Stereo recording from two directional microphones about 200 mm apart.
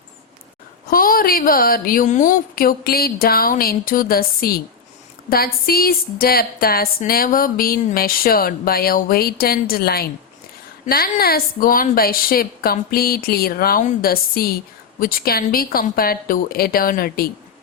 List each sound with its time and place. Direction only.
0.9 s a woman's voice: 45° left (ahead or behind)